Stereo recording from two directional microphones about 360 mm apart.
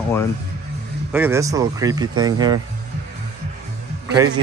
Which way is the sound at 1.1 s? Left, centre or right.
Centre.